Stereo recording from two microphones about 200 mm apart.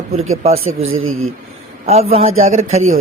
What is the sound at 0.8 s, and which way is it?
Speech, 90° right.